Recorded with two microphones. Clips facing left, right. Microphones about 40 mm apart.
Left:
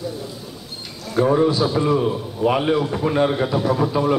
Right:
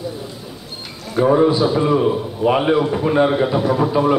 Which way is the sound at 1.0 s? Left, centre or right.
Centre.